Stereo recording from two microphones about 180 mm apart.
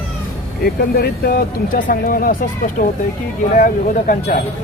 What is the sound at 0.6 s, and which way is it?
Speech, 60° left (ahead or behind).